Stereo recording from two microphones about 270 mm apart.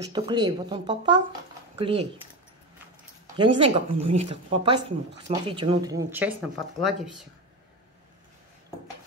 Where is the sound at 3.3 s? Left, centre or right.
Centre.